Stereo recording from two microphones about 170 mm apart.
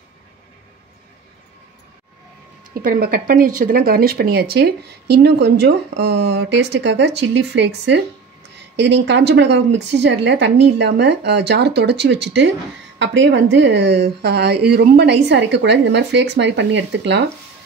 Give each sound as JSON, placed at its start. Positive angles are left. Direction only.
{"t": 2.7, "sound": "a woman's voice", "side_deg": -60}
{"t": 15.2, "sound": "speech", "side_deg": -90}